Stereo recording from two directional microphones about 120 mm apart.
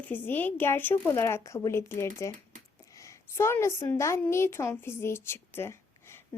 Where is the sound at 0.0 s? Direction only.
15° left (ahead or behind).